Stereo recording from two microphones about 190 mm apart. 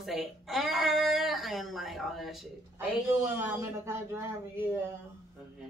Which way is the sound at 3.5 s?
15° right (ahead or behind).